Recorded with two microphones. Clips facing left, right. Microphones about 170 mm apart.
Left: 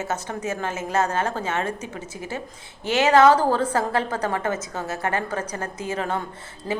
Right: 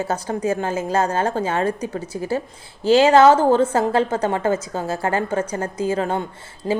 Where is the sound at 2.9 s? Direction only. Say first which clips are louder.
Right 4 dB; 30° right (ahead or behind).